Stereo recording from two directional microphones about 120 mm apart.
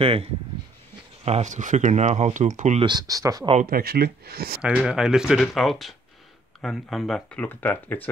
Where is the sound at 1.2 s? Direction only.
75° right (ahead or behind); by 2.8 s 90° right.